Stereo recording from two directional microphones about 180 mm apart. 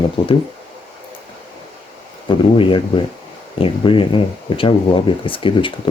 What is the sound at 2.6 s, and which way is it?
Speech, 30° left (ahead or behind).